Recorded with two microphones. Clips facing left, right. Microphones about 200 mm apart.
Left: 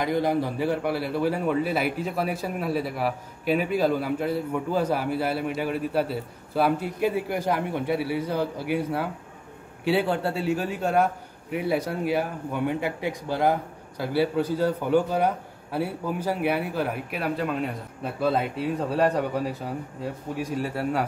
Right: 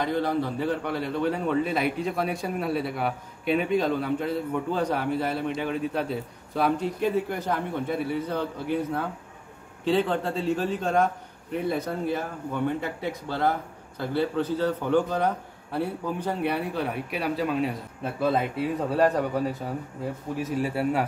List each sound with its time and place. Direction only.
0.0 s a man's voice: 10° left (ahead or behind); by 21.0 s 5° right (ahead or behind)